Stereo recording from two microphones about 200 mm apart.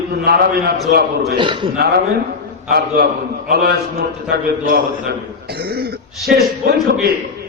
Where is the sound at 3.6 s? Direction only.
55° right (ahead or behind).